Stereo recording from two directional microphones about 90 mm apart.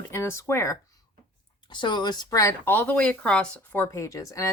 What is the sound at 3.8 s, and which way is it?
Speech, 35° left (ahead or behind).